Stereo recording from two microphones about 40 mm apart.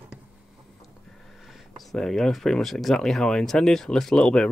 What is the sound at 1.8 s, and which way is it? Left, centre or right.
Speech, centre.